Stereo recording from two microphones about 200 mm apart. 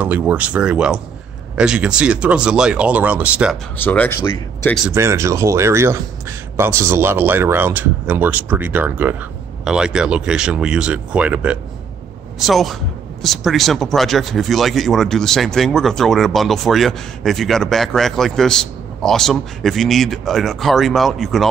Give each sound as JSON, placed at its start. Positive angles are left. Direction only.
{"t": 0.0, "sound": "speech", "side_deg": -10}
{"t": 3.7, "sound": "speech", "side_deg": 10}
{"t": 4.8, "sound": "speech", "side_deg": -15}